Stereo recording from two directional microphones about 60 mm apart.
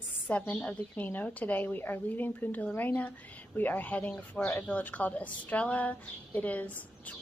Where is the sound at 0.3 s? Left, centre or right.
Left.